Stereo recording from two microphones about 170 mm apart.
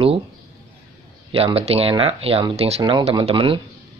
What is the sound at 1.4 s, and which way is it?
Speech, 35° right (ahead or behind).